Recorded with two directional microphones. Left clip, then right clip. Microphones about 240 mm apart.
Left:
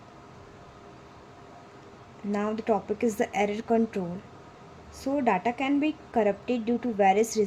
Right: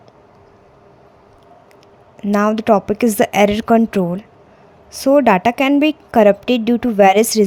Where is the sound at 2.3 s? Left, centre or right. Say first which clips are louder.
Right 14 dB; right.